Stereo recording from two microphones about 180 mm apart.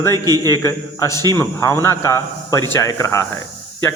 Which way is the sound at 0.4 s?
15° left (ahead or behind).